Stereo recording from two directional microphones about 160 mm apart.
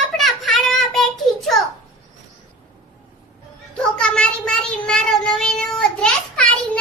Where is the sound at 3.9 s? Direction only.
5° left (ahead or behind).